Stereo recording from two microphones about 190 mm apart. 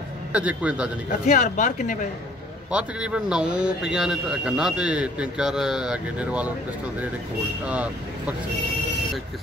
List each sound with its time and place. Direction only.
0.3 s a man's voice: 5° right (ahead or behind)
1.2 s speech: 40° left (ahead or behind)
2.7 s a man's voice: 5° right (ahead or behind)
7.6 s speech: 5° right (ahead or behind)